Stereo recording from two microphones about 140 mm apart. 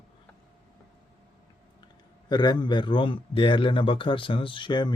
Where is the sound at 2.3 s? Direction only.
30° left (ahead or behind).